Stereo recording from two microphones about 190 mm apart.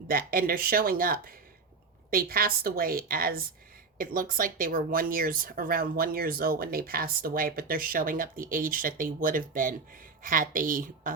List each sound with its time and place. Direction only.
0.1 s speech: 50° right (ahead or behind)